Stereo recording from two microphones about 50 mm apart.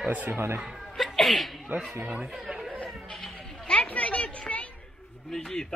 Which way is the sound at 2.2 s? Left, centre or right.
Centre.